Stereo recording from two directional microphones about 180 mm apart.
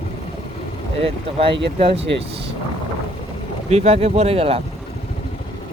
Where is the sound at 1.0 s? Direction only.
30° right (ahead or behind).